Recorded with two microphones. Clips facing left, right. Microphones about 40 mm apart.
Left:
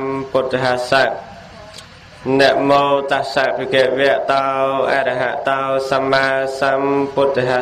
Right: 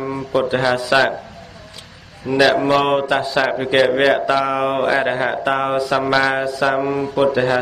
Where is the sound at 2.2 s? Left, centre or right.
Left.